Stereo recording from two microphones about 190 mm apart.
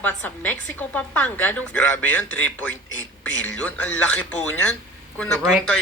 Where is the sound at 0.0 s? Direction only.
10° left (ahead or behind).